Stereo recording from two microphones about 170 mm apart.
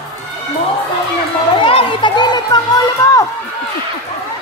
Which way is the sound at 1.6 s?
30° left (ahead or behind).